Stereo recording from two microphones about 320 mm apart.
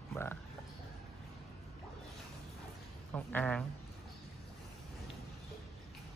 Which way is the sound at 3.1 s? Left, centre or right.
Centre.